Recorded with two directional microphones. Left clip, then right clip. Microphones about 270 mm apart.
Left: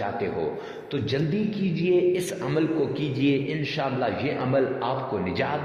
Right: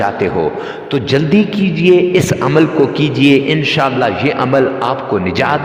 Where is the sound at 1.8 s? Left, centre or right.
Right.